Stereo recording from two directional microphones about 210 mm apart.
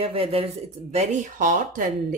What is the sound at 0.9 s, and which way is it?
Speech, 35° right (ahead or behind).